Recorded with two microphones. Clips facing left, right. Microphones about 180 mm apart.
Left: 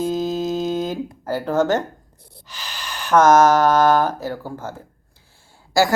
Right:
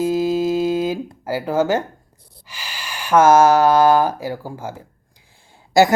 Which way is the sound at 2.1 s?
65° left (ahead or behind).